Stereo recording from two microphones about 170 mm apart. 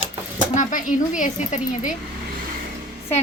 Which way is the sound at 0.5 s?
50° left (ahead or behind).